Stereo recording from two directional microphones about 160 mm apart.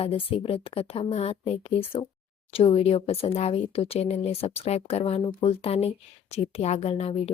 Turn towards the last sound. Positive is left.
turn(degrees=40)  # may be behind; listen again after turning